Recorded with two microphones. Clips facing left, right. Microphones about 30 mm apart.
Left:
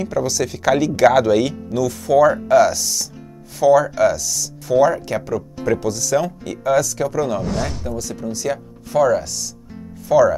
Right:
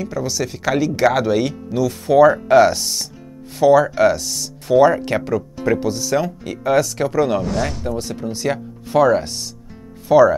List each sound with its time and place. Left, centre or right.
0.0 s speech: centre
1.8 s speech: right
5.7 s speech: right
7.4 s speech: centre
7.9 s speech: right